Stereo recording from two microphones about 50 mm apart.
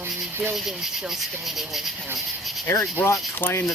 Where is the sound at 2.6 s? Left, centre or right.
Left.